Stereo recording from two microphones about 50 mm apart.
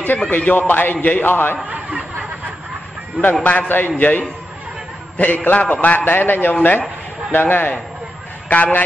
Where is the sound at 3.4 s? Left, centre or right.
Left.